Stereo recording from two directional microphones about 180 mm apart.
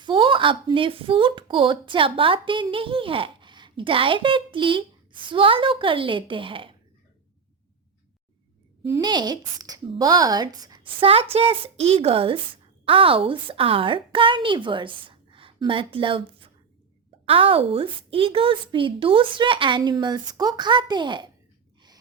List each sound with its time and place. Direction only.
0.0 s speech: 25° right (ahead or behind)
9.0 s a woman's voice: 25° right (ahead or behind)